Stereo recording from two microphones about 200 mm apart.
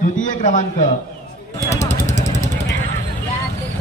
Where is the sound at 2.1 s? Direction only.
35° left (ahead or behind).